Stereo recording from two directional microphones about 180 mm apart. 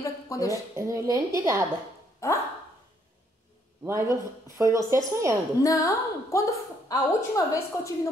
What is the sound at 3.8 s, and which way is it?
Speech, 15° right (ahead or behind).